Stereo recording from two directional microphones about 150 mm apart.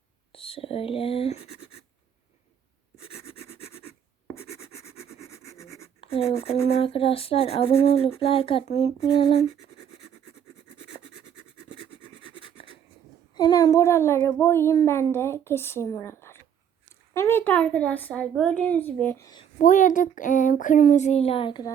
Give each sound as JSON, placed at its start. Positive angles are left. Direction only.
{"t": 0.3, "sound": "speech", "side_deg": 40}
{"t": 4.4, "sound": "a sound", "side_deg": 20}
{"t": 6.0, "sound": "writing", "side_deg": 40}
{"t": 6.4, "sound": "speech", "side_deg": 40}
{"t": 11.7, "sound": "scratch", "side_deg": 35}
{"t": 13.3, "sound": "a child's voice", "side_deg": 25}
{"t": 19.2, "sound": "speech", "side_deg": 25}
{"t": 19.5, "sound": "speech", "side_deg": 60}